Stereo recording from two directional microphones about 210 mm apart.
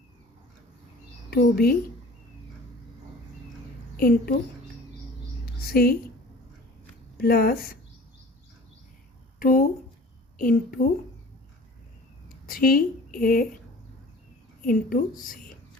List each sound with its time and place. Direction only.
1.3 s speech: 50° left (ahead or behind)
3.9 s a woman's voice: 45° left (ahead or behind)
5.7 s speech: 45° left (ahead or behind)
7.2 s speech: 45° left (ahead or behind)
9.4 s speech: 40° left (ahead or behind)
12.5 s a woman's voice: 45° left (ahead or behind)
14.6 s a woman's voice: 40° left (ahead or behind)